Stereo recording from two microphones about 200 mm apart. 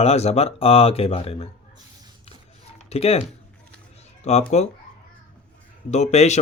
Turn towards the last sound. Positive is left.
turn(degrees=35)  # may be behind; listen again after turning